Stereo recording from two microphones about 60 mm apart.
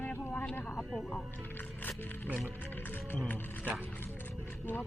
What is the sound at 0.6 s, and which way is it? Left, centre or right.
Speech, left.